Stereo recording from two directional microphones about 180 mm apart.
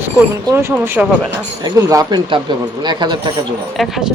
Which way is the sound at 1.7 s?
20° right (ahead or behind).